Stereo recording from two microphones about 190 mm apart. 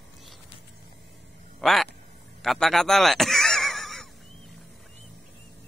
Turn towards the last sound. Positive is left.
turn(degrees=0)  # may be behind; listen again after turning